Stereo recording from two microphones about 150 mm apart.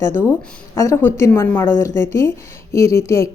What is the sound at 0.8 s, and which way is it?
Speech, 20° left (ahead or behind).